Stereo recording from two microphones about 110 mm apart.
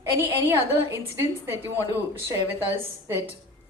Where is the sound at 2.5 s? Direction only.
20° right (ahead or behind).